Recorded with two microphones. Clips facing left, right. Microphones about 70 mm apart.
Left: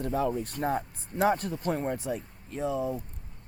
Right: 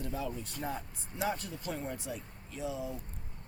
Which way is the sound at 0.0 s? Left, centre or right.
Left.